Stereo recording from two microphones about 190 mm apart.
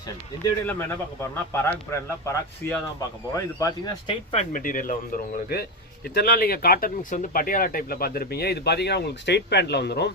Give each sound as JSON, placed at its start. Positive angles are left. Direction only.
{"t": 0.6, "sound": "speech", "side_deg": 10}
{"t": 4.5, "sound": "speech", "side_deg": 45}